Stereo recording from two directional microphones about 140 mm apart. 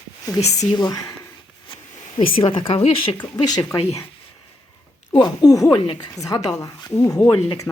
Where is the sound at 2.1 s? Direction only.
40° left (ahead or behind).